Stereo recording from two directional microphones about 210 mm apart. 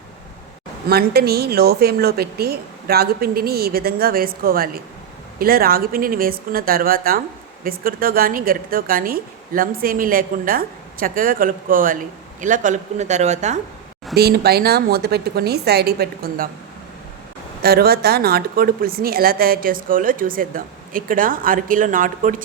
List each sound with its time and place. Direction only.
0.9 s a woman's voice: 50° right (ahead or behind)
14.2 s a woman's voice: 50° right (ahead or behind)
17.6 s a woman's voice: 45° right (ahead or behind)